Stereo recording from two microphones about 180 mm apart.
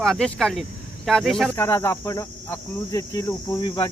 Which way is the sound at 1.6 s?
15° left (ahead or behind).